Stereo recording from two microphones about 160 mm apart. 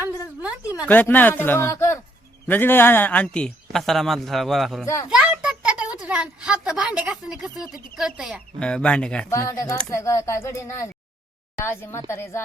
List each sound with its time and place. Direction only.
0.0 s a sound: 10° right (ahead or behind)
0.9 s speech: 10° left (ahead or behind)
5.0 s a sound: 5° right (ahead or behind)
6.0 s speech: 10° right (ahead or behind)
8.5 s speech: 5° left (ahead or behind)
9.3 s speech: 20° left (ahead or behind)